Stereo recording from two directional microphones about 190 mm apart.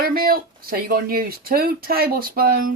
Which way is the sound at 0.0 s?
50° right (ahead or behind).